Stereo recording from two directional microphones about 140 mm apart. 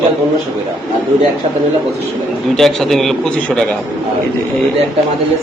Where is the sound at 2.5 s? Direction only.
Centre (ahead or behind).